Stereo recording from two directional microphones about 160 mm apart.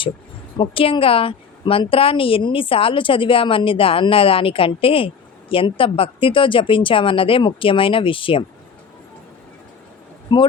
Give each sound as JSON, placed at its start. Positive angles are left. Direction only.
{"t": 0.5, "sound": "a woman's voice", "side_deg": 35}
{"t": 10.3, "sound": "speech", "side_deg": 30}